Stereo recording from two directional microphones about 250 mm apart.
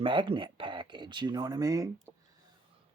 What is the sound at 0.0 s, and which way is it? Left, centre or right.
Speech, centre.